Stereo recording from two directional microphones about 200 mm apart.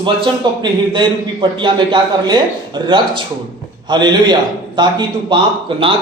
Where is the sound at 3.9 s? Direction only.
20° right (ahead or behind).